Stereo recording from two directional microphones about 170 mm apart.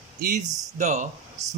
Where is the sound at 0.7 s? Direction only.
45° right (ahead or behind).